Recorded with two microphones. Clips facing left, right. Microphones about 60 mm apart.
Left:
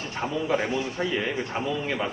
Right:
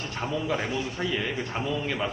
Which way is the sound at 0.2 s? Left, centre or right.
Centre.